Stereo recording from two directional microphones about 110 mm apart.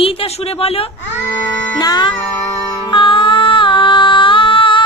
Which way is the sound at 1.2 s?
20° left (ahead or behind).